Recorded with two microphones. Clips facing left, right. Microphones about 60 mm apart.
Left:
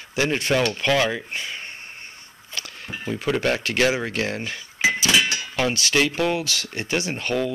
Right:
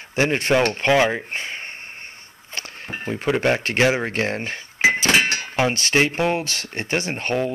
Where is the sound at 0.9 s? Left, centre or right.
Right.